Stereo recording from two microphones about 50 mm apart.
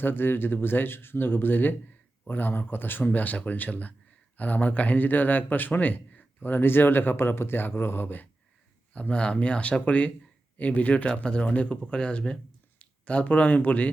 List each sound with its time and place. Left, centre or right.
0.0 s speech: left
8.9 s speech: left